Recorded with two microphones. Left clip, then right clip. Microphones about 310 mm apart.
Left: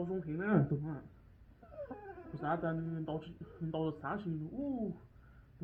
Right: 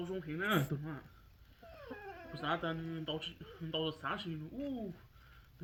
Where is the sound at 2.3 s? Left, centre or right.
Right.